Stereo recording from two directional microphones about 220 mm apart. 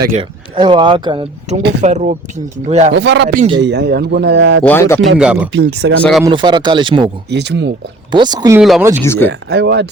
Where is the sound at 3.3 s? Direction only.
25° right (ahead or behind).